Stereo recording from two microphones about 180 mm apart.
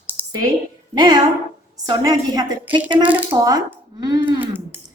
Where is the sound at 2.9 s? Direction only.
10° right (ahead or behind).